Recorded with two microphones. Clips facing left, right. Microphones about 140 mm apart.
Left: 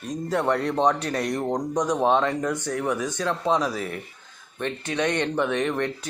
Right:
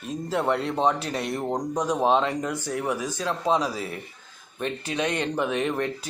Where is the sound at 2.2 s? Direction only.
15° right (ahead or behind).